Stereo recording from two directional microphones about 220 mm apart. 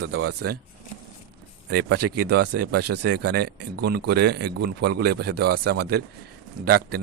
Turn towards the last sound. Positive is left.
turn(degrees=-45)  # may be behind; listen again after turning